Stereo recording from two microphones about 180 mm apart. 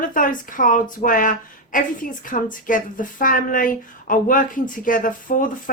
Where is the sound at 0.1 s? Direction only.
50° left (ahead or behind).